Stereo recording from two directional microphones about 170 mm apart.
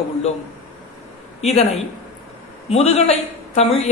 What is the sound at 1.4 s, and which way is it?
Speech, 40° left (ahead or behind).